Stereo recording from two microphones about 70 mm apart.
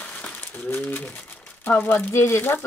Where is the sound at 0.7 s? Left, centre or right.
Left.